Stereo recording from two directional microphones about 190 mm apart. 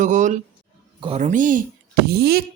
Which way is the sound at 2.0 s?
55° right (ahead or behind).